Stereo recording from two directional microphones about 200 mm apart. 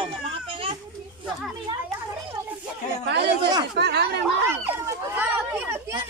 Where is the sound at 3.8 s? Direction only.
55° right (ahead or behind).